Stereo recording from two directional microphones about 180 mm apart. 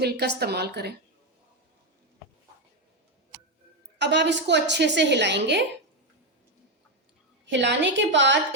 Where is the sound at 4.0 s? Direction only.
80° right.